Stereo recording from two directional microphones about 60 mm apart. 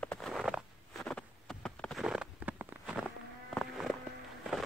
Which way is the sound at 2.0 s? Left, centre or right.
Centre.